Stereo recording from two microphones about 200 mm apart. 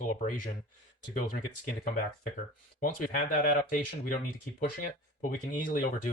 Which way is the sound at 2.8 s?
45° left (ahead or behind).